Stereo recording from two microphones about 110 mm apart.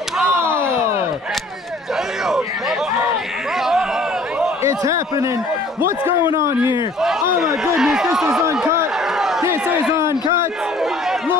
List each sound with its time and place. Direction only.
0.3 s a sound: 25° right (ahead or behind)
4.6 s a man's voice: 30° right (ahead or behind)
7.0 s a man's voice: 5° right (ahead or behind)
9.4 s a man's voice: 20° right (ahead or behind)